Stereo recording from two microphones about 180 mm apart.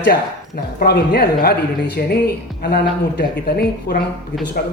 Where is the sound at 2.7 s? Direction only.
60° left (ahead or behind).